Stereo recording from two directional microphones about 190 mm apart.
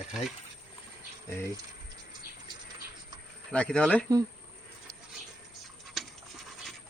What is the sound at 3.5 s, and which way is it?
Speech, 5° left (ahead or behind).